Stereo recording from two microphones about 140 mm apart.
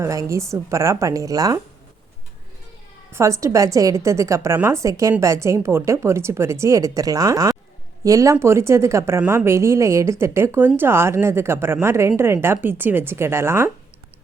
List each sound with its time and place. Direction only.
0.0 s speech: 20° right (ahead or behind)
3.1 s a woman's voice: 20° right (ahead or behind)